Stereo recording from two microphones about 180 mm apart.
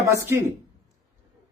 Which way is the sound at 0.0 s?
15° right (ahead or behind).